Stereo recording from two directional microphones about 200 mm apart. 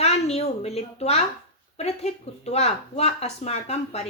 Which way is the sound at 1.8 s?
30° left (ahead or behind).